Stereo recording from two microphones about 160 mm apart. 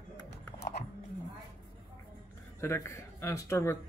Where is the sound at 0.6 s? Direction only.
90° left.